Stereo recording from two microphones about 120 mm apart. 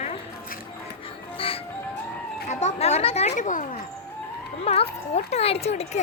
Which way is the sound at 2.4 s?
70° left (ahead or behind).